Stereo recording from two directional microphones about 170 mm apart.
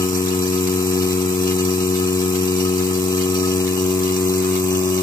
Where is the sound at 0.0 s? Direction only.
20° left (ahead or behind).